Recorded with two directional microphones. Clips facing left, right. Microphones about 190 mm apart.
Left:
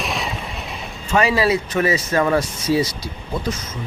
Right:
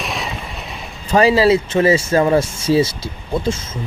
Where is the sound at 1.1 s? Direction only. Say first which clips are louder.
Right 5 dB; 35° right (ahead or behind).